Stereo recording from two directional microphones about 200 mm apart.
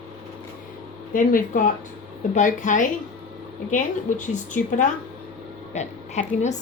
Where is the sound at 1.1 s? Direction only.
40° left (ahead or behind).